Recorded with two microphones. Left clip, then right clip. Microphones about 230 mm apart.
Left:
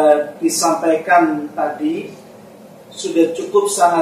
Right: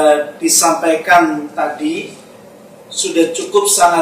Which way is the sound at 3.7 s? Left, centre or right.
Centre.